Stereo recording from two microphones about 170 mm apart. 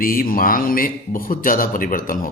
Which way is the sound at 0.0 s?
55° left (ahead or behind).